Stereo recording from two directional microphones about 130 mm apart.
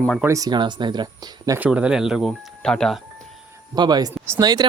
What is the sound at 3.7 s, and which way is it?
Speech, 35° right (ahead or behind).